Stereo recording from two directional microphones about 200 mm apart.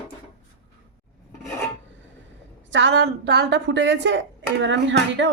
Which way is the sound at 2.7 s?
65° right (ahead or behind).